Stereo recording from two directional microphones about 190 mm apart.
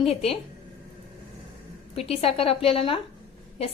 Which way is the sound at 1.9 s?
30° left (ahead or behind).